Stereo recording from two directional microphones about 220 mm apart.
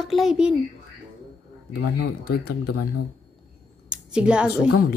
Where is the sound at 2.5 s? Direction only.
90° left.